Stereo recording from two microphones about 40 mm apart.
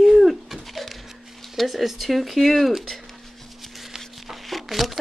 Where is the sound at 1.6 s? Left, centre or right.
Centre.